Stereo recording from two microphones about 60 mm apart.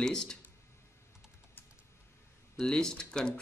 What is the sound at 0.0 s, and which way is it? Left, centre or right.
Speech, centre.